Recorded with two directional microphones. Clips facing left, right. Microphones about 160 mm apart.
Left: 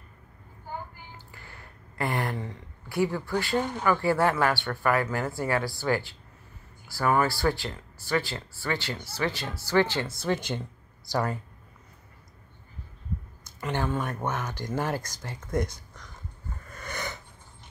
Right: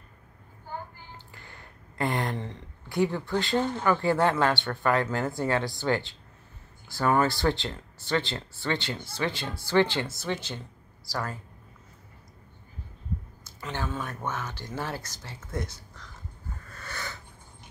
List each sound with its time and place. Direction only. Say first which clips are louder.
1.3 s a sound: even; 20° right (ahead or behind)
2.9 s speech: even; 20° right (ahead or behind)
3.5 s speech: right 2 dB; 15° left (ahead or behind)
3.8 s speech: left 1 dB; 20° right (ahead or behind)
7.2 s speech: even; 20° right (ahead or behind)
10.2 s speech: left 4 dB; 10° left (ahead or behind)
11.1 s speech: left 5 dB; 20° left (ahead or behind)
13.4 s a sound: left 6 dB; 15° left (ahead or behind)
14.2 s speech: left 3 dB; 15° left (ahead or behind)
16.7 s snort: left 4 dB; 20° left (ahead or behind)